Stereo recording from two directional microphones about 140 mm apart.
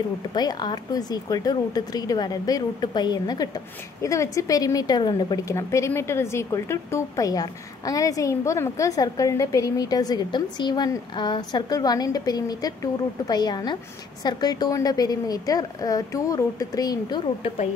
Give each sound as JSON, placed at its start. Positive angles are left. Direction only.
{"t": 0.3, "sound": "speech", "side_deg": 30}